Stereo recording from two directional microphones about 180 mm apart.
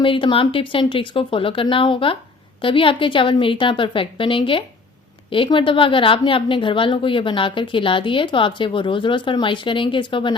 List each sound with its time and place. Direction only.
0.0 s a woman's voice: 30° left (ahead or behind)